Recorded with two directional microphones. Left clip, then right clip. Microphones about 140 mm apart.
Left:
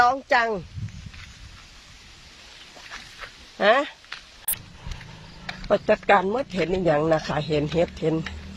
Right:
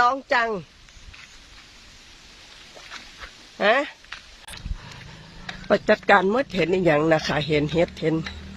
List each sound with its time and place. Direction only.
0.0 s speech: centre (ahead or behind)
3.6 s speech: centre (ahead or behind)
5.5 s a sound: 90° left
5.8 s speech: 30° right (ahead or behind)